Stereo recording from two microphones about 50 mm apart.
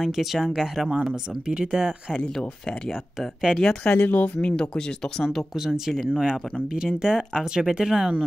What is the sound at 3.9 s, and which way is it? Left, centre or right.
Speech, left.